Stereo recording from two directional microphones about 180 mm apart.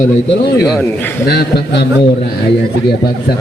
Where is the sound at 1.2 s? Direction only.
60° left (ahead or behind).